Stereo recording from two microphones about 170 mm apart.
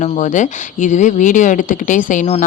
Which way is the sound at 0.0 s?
45° left (ahead or behind).